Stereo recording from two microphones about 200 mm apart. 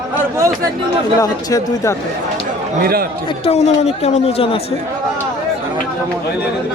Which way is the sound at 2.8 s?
50° right (ahead or behind).